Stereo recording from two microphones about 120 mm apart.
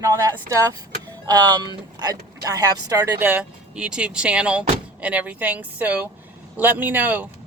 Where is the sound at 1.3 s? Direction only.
35° right (ahead or behind).